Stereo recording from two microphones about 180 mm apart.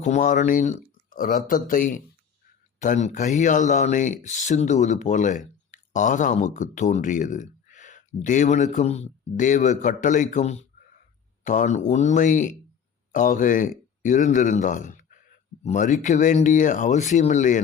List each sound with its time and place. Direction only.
0.0 s speech: 45° left (ahead or behind)